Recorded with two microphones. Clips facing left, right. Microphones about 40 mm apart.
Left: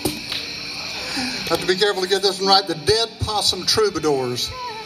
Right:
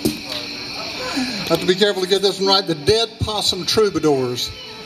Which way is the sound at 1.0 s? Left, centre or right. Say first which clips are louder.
Right 3 dB; right.